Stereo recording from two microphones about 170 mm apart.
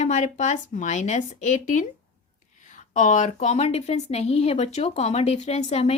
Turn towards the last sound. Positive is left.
turn(degrees=40)  # may be behind; listen again after turning